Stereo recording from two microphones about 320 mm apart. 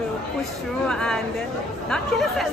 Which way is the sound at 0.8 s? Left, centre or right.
Centre.